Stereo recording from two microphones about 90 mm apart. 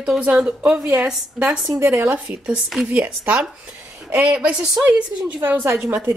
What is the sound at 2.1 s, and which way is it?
A woman's voice, 20° right (ahead or behind).